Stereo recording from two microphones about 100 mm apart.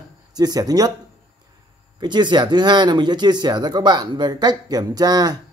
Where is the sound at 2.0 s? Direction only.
50° right (ahead or behind).